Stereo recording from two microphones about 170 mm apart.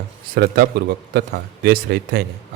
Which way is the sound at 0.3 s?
65° right (ahead or behind).